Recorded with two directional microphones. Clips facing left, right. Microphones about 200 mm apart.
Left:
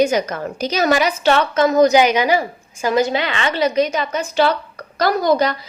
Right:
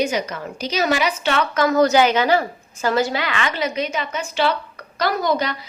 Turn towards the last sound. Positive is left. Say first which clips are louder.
# left 5 dB
turn(degrees=40)  # may be behind; listen again after turning